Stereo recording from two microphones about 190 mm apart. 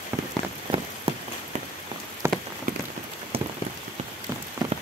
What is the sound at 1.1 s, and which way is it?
Rain on surface, 30° right (ahead or behind).